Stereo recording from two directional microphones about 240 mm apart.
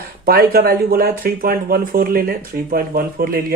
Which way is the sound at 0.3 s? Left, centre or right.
Right.